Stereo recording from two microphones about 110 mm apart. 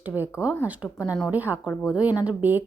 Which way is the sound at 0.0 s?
15° right (ahead or behind).